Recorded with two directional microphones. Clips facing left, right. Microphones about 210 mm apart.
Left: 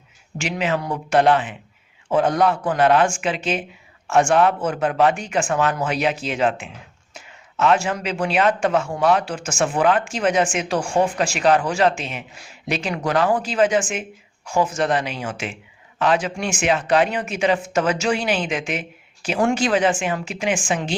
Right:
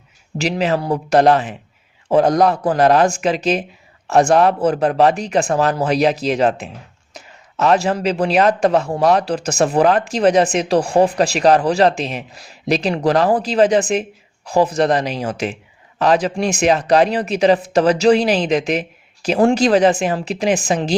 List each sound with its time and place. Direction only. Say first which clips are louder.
0.3 s speech: right 5 dB; 35° right (ahead or behind)